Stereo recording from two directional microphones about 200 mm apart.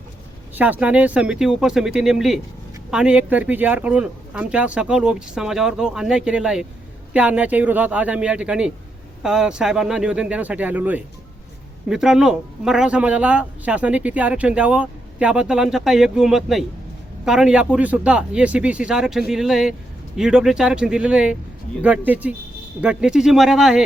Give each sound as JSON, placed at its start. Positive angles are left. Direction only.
{"t": 0.5, "sound": "a man's voice", "side_deg": -10}